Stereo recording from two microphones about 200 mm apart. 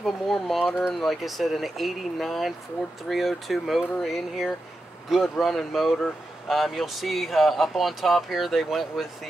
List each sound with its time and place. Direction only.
0.0 s speech: centre (ahead or behind)